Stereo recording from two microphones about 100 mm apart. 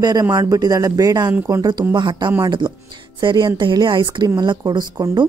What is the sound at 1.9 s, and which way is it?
Speech, 50° right (ahead or behind).